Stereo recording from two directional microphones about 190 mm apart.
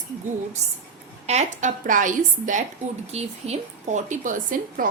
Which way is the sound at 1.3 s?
40° right (ahead or behind).